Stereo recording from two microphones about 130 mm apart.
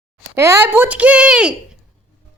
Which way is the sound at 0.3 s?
20° right (ahead or behind).